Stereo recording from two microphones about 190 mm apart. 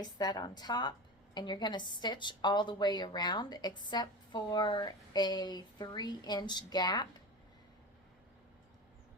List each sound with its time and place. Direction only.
0.0 s a woman's voice: 20° left (ahead or behind)